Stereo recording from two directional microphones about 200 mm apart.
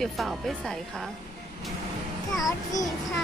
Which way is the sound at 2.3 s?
15° left (ahead or behind).